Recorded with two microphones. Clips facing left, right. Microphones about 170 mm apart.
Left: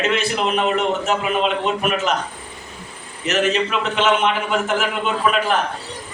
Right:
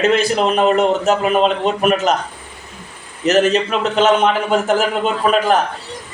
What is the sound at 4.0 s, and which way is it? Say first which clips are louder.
A man's voice: right 5 dB; 40° right (ahead or behind).